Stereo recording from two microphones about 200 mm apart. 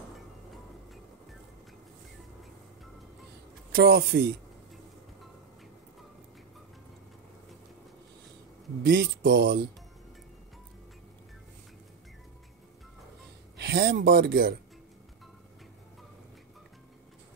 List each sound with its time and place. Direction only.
3.7 s speech: 55° right (ahead or behind)
8.8 s speech: 50° right (ahead or behind)
13.6 s speech: 50° right (ahead or behind)